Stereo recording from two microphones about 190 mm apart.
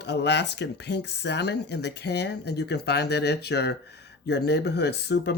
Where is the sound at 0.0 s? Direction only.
65° left (ahead or behind).